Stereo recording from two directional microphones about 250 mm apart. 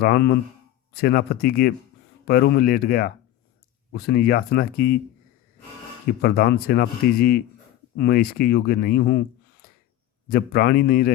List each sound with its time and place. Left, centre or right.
0.0 s speech: left
6.2 s speech: left